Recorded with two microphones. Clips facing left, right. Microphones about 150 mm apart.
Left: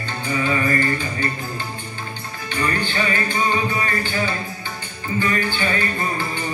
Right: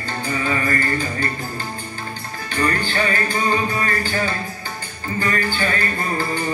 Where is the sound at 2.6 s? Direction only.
40° right (ahead or behind).